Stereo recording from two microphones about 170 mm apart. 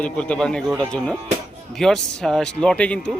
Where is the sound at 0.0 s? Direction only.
5° left (ahead or behind).